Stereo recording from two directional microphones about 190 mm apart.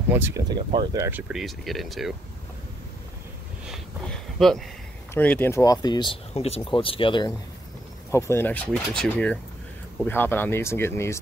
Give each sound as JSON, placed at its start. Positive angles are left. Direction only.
{"t": 0.1, "sound": "speech", "side_deg": -10}
{"t": 0.6, "sound": "speech", "side_deg": -25}
{"t": 1.3, "sound": "speech", "side_deg": 0}
{"t": 3.6, "sound": "a sound", "side_deg": 0}
{"t": 5.1, "sound": "speech", "side_deg": 10}
{"t": 8.1, "sound": "speech", "side_deg": 15}